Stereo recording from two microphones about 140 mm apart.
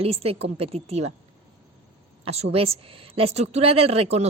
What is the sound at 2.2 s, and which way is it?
Speech, 45° right (ahead or behind).